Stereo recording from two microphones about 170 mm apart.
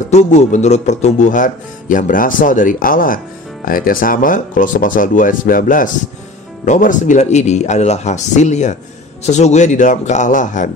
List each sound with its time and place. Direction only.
0.1 s speech: 45° left (ahead or behind)